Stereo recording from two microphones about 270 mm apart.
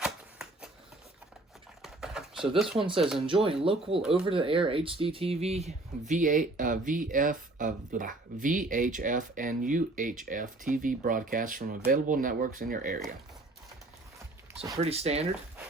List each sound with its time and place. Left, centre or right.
0.0 s shuffling cards: centre
1.8 s typing: centre
2.6 s speech: centre
2.8 s speech: centre
14.5 s speech: right